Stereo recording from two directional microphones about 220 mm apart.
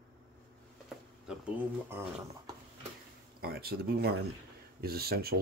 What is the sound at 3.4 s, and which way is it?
Speech, 45° right (ahead or behind).